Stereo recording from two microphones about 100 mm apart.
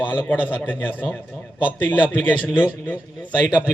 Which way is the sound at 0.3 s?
20° left (ahead or behind).